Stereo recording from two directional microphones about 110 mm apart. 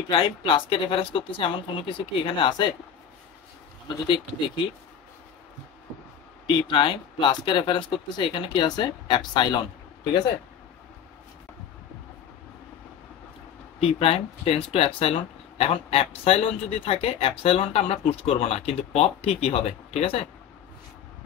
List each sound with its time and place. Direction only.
0.1 s speech: 50° left (ahead or behind)
6.5 s speech: 45° left (ahead or behind)
13.7 s speech: 60° left (ahead or behind)